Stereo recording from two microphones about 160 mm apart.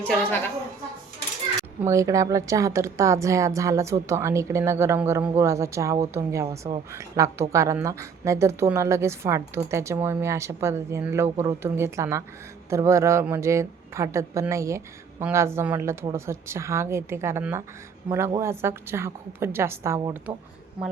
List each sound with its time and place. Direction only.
0.0 s a woman's voice: 10° left (ahead or behind)
1.8 s a woman's voice: 20° right (ahead or behind)